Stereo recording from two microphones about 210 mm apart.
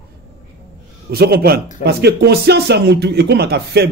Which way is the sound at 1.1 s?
50° right (ahead or behind).